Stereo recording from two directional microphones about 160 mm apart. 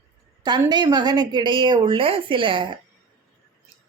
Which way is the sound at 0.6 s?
25° right (ahead or behind).